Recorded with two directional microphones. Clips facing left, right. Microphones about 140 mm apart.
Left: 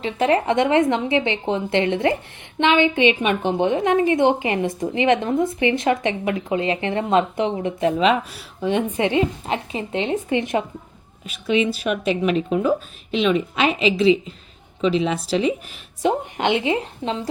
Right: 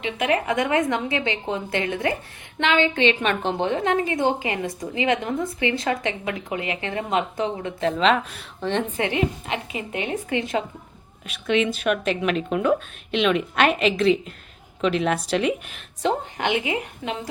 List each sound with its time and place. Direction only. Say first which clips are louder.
0.0 s a woman's voice: left 4 dB; 30° left (ahead or behind); by 8.8 s 10° left (ahead or behind)
9.0 s a woman's voice: left 4 dB; 20° left (ahead or behind)
11.3 s speech: left 2 dB; 5° left (ahead or behind)
16.0 s a woman's voice: left 3 dB; 20° left (ahead or behind)